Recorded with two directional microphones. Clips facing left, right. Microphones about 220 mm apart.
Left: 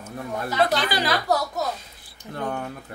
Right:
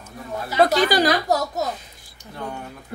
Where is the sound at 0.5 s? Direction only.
45° right (ahead or behind).